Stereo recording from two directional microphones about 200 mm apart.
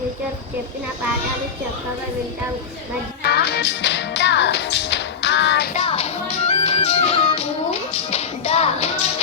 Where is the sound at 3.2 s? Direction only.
55° left (ahead or behind).